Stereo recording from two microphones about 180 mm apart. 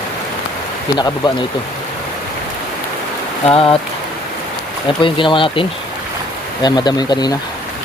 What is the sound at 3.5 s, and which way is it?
Speech, 30° left (ahead or behind).